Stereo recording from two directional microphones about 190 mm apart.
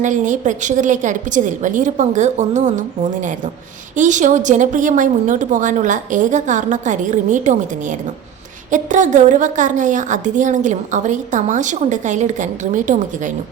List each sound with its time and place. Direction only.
0.0 s a woman's voice: 40° right (ahead or behind)